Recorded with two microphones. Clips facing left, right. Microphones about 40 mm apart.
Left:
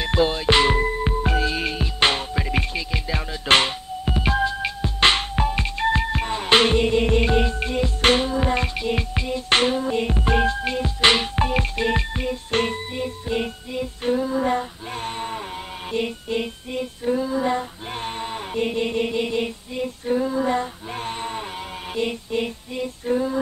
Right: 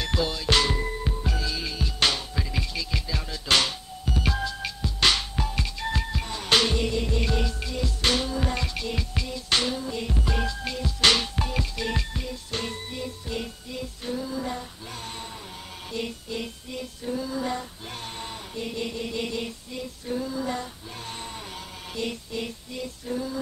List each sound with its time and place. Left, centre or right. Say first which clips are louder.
0.0 s music: left 7 dB; left
15.9 s female singing: left 7 dB; left